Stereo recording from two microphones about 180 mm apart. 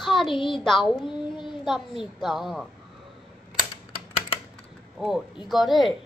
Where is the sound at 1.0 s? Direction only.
25° left (ahead or behind).